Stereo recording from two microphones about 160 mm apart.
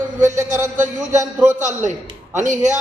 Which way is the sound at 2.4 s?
50° right (ahead or behind).